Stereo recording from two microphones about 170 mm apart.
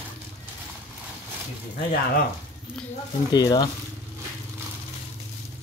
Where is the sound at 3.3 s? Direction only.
25° left (ahead or behind).